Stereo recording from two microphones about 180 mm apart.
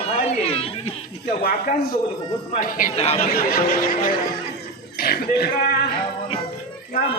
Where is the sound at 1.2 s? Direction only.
55° left (ahead or behind).